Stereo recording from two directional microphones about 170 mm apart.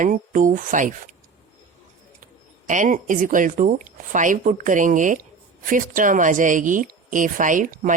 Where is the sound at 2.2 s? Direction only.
50° right (ahead or behind).